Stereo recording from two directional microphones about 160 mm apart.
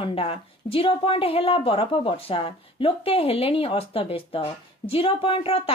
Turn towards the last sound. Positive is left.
turn(degrees=35)  # may be behind; listen again after turning